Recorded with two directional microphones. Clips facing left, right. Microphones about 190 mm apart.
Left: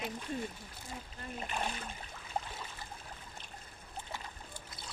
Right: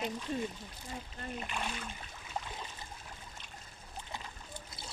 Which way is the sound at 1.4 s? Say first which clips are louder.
Left 4 dB; 35° left (ahead or behind).